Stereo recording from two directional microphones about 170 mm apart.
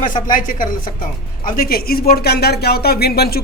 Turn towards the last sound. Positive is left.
turn(degrees=65)  # may be behind; listen again after turning